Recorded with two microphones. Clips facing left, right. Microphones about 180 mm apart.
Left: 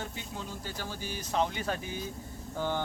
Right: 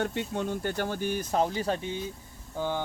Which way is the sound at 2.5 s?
15° right (ahead or behind).